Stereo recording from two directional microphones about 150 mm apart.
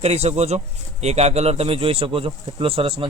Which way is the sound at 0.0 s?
45° right (ahead or behind).